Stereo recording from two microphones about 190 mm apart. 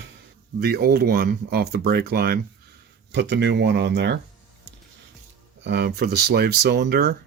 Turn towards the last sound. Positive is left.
turn(degrees=-60)  # may be behind; listen again after turning